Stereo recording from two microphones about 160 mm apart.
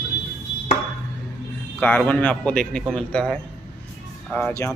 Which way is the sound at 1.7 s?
10° left (ahead or behind).